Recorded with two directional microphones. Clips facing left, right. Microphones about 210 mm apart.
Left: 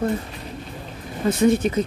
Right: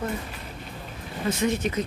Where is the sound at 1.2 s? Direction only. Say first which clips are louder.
Left 7 dB; 35° left (ahead or behind).